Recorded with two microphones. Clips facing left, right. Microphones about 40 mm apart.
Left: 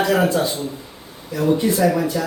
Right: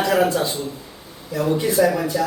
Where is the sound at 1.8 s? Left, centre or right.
Centre.